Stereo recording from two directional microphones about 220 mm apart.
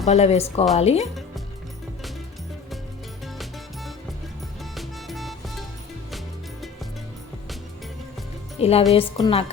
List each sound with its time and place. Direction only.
0.0 s a woman's voice: 30° left (ahead or behind)
4.7 s music: centre (ahead or behind)
8.5 s a woman's voice: 25° left (ahead or behind)